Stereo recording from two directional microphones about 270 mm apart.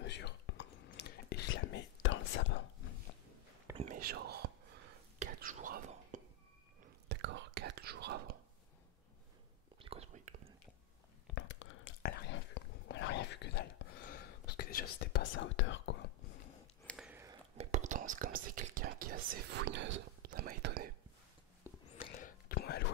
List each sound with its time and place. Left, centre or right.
0.0 s whispering: left
3.7 s whispering: right
7.1 s whispering: right
9.8 s whispering: right
11.3 s whispering: left
16.8 s a sound: centre
17.6 s whispering: right
22.0 s whispering: left